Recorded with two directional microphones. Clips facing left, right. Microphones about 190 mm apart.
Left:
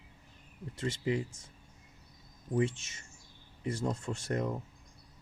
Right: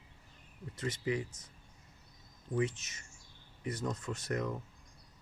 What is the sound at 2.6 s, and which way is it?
Speech, 25° left (ahead or behind).